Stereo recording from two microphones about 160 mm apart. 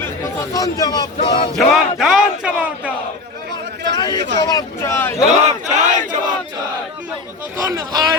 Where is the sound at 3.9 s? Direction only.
25° left (ahead or behind).